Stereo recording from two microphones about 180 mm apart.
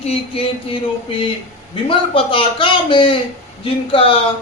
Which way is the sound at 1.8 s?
30° left (ahead or behind).